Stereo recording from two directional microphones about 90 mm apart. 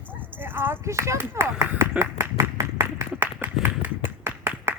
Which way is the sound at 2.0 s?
30° right (ahead or behind).